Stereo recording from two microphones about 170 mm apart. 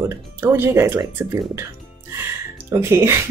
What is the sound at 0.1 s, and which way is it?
Speech, 15° right (ahead or behind).